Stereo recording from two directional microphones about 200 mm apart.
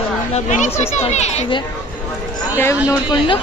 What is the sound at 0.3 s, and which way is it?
Speech, 35° left (ahead or behind).